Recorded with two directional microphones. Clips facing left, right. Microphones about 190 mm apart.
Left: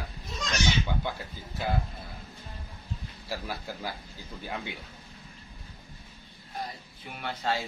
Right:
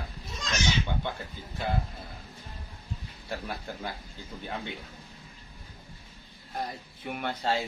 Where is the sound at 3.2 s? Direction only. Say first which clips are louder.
Even; 5° left (ahead or behind).